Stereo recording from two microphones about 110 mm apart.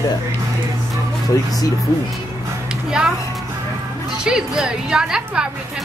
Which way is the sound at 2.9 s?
5° right (ahead or behind).